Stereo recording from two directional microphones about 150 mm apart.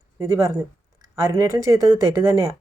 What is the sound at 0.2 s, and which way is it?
Speech, 20° right (ahead or behind).